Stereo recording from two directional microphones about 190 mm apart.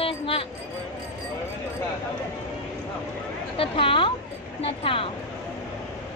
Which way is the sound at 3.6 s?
30° left (ahead or behind).